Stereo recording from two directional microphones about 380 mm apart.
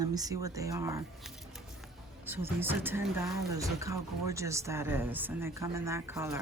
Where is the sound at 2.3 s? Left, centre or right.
Centre.